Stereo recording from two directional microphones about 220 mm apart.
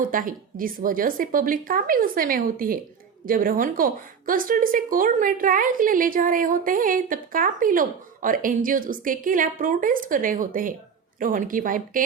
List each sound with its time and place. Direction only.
0.0 s a woman's voice: 40° right (ahead or behind)